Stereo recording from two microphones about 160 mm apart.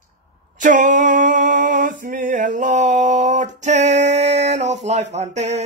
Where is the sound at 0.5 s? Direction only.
55° right (ahead or behind).